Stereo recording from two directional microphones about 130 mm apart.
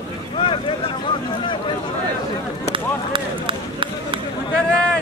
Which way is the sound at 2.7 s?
40° right (ahead or behind).